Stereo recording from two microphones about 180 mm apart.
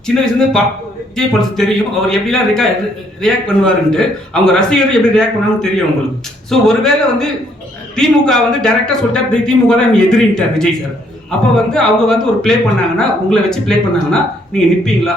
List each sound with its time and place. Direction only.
0.1 s speech: 5° left (ahead or behind)